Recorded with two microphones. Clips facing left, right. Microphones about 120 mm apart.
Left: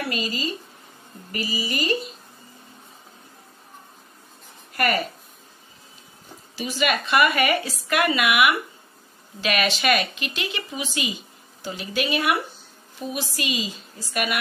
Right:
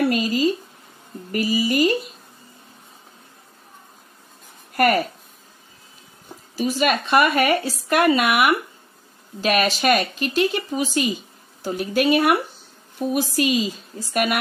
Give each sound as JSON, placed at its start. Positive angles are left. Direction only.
{"t": 0.1, "sound": "a woman's voice", "side_deg": -50}
{"t": 4.7, "sound": "speech", "side_deg": -45}
{"t": 6.5, "sound": "a woman's voice", "side_deg": -40}